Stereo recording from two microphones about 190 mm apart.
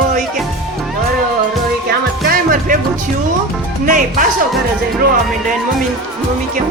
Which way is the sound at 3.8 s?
45° right (ahead or behind).